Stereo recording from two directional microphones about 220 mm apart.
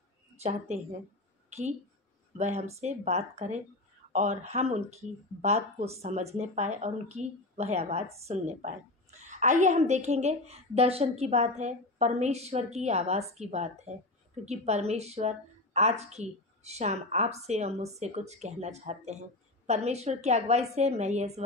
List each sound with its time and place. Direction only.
0.4 s a woman's voice: 30° right (ahead or behind)